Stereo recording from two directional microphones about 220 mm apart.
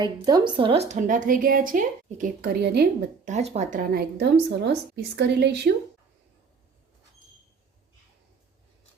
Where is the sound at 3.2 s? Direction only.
30° right (ahead or behind); by 5.7 s 50° right (ahead or behind).